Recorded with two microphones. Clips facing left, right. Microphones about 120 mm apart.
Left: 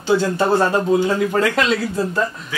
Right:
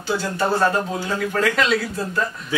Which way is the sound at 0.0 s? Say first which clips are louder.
Left 5 dB; 20° left (ahead or behind).